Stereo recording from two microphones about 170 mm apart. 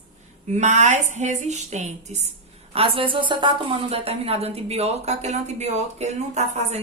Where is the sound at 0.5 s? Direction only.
45° right (ahead or behind).